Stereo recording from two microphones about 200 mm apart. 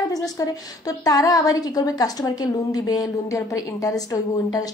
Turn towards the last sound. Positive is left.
turn(degrees=15)  # may be behind; listen again after turning